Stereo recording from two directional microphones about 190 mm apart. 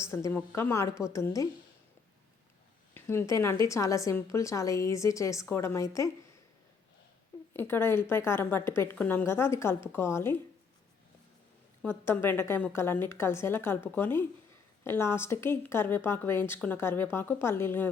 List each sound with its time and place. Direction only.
0.1 s a woman's voice: 15° left (ahead or behind)
2.9 s a woman's voice: 15° left (ahead or behind)
7.5 s a woman's voice: 10° left (ahead or behind)
11.8 s a woman's voice: 10° left (ahead or behind)